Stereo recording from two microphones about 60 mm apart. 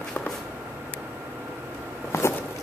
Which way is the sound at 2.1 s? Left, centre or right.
Left.